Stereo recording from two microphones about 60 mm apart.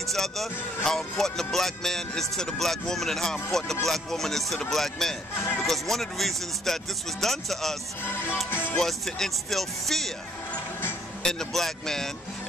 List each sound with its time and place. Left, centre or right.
0.1 s speech: centre
5.4 s speech: left
5.7 s speech: centre
8.0 s music: left
8.7 s speech: centre
11.2 s speech: centre